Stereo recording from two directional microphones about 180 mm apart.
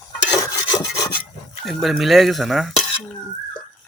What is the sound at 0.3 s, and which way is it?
Rub, 20° left (ahead or behind).